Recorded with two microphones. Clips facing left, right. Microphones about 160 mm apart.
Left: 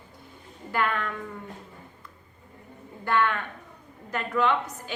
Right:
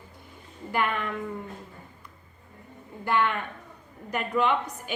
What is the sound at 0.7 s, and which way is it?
Speech, 15° right (ahead or behind).